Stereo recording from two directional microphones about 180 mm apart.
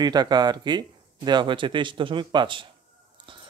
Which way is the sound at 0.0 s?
20° right (ahead or behind).